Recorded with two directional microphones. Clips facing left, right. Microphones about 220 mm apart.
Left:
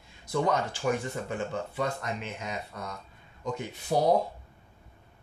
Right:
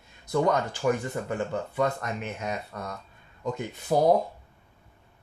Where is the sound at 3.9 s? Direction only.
65° right (ahead or behind).